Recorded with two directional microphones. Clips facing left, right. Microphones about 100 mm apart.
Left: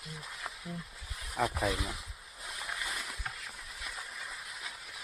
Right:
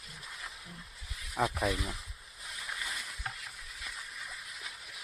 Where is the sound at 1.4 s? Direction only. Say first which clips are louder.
Right 1 dB; 5° right (ahead or behind).